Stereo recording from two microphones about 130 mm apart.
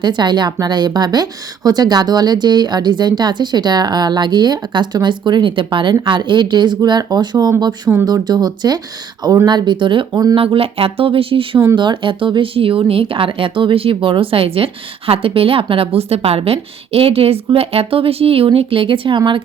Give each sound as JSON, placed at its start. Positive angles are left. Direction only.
{"t": 0.0, "sound": "a woman's voice", "side_deg": -35}
{"t": 10.3, "sound": "speech", "side_deg": -45}